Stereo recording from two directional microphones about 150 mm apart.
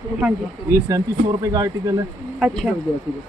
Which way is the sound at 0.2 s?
20° right (ahead or behind).